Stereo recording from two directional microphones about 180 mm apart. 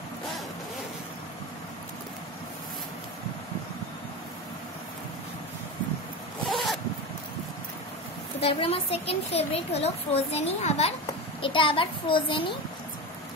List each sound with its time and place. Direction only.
6.4 s zipper: centre (ahead or behind)
8.4 s a woman's voice: 35° left (ahead or behind)